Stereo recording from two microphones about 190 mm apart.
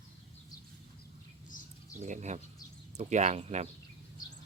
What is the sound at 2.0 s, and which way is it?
Speech, 40° right (ahead or behind).